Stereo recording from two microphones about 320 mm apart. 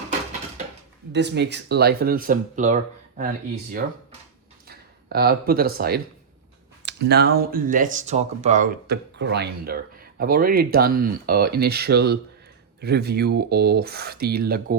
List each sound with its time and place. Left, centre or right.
1.1 s speech: right
4.7 s speech: right